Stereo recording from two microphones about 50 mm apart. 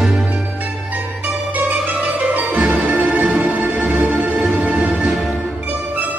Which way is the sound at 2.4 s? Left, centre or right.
Right.